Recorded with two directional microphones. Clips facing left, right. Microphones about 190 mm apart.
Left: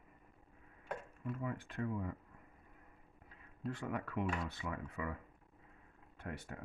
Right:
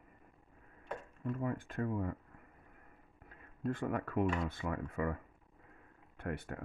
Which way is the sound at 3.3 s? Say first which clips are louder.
Right 6 dB; 50° right (ahead or behind).